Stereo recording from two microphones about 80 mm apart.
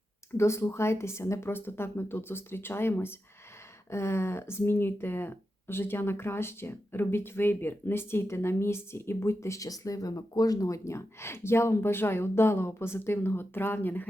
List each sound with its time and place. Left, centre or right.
0.3 s speech: left